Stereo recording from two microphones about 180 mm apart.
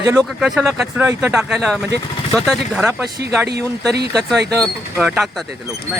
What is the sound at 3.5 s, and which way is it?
Speech, 65° right (ahead or behind).